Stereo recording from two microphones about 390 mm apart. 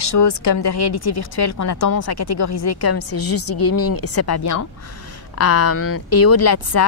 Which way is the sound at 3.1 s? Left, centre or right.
Left.